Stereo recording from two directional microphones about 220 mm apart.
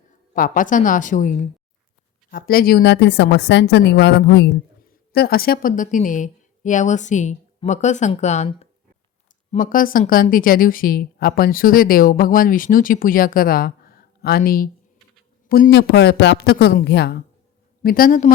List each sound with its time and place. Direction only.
0.3 s a woman's voice: 40° left (ahead or behind)